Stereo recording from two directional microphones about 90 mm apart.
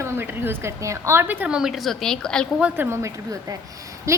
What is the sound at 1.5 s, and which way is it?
Speech, 5° right (ahead or behind).